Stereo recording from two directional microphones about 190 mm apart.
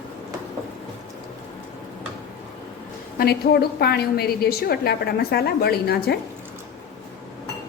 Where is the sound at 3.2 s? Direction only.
55° left (ahead or behind).